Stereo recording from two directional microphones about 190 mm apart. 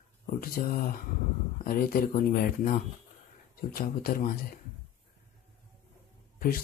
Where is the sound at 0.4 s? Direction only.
50° left (ahead or behind).